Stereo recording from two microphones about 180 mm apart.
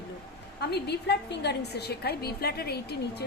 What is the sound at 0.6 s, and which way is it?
A woman's voice, 65° left (ahead or behind).